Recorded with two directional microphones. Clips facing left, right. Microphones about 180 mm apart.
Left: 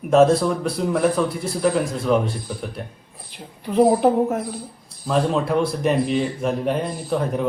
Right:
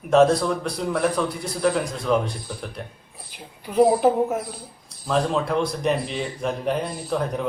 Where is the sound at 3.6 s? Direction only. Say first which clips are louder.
Left 1 dB; centre (ahead or behind).